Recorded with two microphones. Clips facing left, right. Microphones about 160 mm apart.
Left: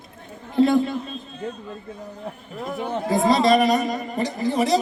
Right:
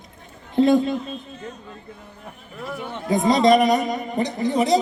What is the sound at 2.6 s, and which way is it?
Speech, 20° left (ahead or behind).